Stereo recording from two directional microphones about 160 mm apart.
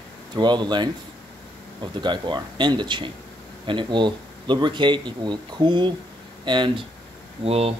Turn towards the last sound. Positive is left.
turn(degrees=-40)  # may be behind; listen again after turning